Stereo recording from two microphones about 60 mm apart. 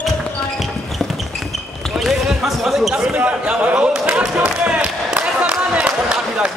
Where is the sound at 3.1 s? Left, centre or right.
Right.